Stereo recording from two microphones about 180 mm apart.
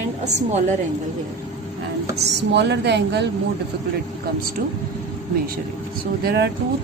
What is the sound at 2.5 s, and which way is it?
Speech, 70° right (ahead or behind).